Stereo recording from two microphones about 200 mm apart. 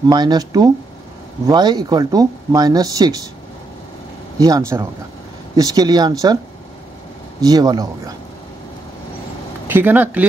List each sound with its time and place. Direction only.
0.0 s speech: 20° right (ahead or behind)
4.4 s speech: 15° right (ahead or behind)
7.3 s speech: 20° right (ahead or behind)
9.7 s speech: 10° right (ahead or behind)